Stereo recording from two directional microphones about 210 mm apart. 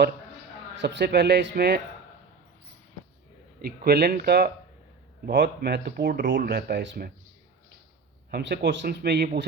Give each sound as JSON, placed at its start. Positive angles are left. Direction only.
{"t": 0.8, "sound": "speech", "side_deg": -55}
{"t": 3.6, "sound": "speech", "side_deg": -50}
{"t": 8.3, "sound": "speech", "side_deg": -50}